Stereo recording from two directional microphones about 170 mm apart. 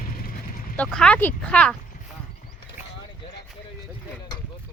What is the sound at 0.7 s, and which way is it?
Speech, 5° left (ahead or behind).